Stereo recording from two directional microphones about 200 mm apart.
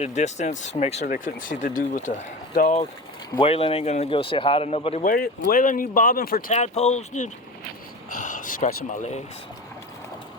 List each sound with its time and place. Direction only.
0.0 s speech: 35° left (ahead or behind)
1.0 s speech: 45° left (ahead or behind)
3.3 s speech: 30° left (ahead or behind)
5.0 s speech: 45° left (ahead or behind)
6.5 s speech: 35° left (ahead or behind)